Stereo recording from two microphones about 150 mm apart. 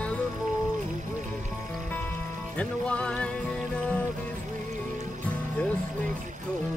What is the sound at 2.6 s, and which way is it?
Music, 10° left (ahead or behind).